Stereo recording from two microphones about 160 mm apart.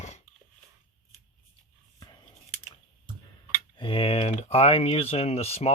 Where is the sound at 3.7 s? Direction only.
35° left (ahead or behind).